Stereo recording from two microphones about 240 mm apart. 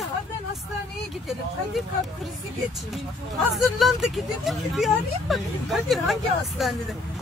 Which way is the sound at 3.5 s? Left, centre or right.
Centre.